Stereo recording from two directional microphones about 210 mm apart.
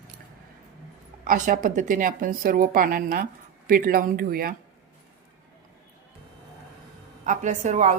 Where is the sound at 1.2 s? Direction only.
40° right (ahead or behind).